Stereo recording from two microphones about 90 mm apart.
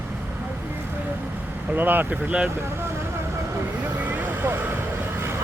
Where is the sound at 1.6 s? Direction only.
20° right (ahead or behind).